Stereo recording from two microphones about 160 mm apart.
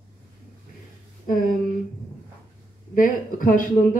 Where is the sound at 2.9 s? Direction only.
55° left (ahead or behind).